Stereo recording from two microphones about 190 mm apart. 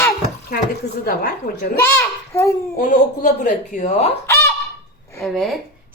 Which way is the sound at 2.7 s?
45° left (ahead or behind).